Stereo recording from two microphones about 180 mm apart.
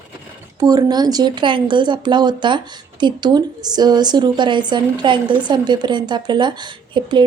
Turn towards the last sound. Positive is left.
turn(degrees=-25)  # may be behind; listen again after turning